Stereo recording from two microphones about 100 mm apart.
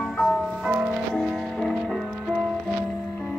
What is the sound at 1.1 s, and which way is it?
Music, 5° left (ahead or behind).